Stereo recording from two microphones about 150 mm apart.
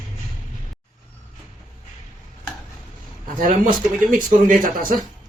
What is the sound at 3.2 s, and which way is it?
Speech, 65° right (ahead or behind).